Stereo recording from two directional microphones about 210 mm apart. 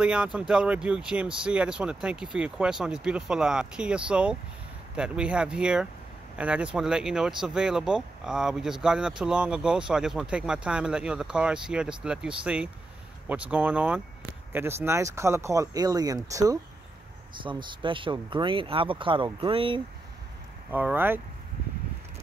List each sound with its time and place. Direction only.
0.0 s speech: 5° right (ahead or behind); by 19.8 s 25° right (ahead or behind)
20.7 s speech: 10° right (ahead or behind)